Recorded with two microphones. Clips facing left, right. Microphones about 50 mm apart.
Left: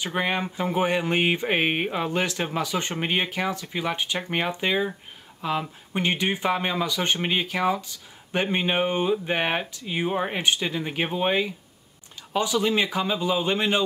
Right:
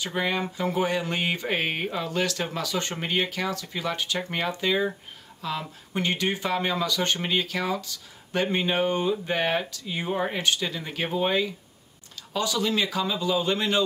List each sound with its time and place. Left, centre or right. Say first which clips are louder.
0.0 s speech: left 1 dB; left